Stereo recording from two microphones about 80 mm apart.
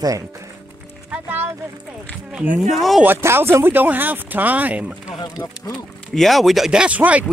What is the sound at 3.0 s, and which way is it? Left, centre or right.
Speech, right.